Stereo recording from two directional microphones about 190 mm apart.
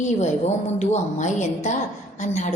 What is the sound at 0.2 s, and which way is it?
A woman's voice, 35° left (ahead or behind).